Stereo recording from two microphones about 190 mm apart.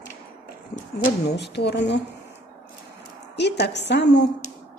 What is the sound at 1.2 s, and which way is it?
Speech, 60° left (ahead or behind).